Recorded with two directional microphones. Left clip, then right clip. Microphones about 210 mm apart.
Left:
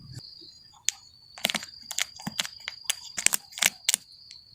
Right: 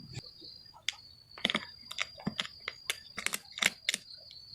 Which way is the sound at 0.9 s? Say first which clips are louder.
Left 5 dB; 15° left (ahead or behind).